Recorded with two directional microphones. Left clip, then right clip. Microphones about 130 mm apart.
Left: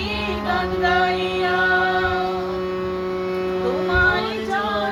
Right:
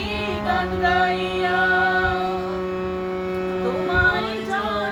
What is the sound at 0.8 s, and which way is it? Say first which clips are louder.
Music: left 1 dB; 30° right (ahead or behind).